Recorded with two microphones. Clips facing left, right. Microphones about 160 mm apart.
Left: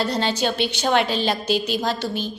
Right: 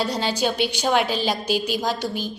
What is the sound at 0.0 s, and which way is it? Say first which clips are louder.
A woman's voice: left 1 dB; 10° right (ahead or behind).